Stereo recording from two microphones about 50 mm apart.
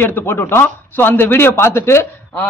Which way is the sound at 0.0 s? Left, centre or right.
Left.